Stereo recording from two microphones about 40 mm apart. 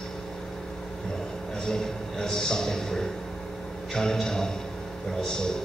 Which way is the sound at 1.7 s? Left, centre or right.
Centre.